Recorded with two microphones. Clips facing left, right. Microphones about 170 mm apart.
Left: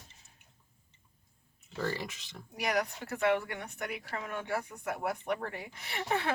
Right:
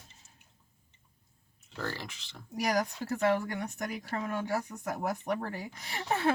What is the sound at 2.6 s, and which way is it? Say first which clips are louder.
Speech: right 2 dB; 35° right (ahead or behind).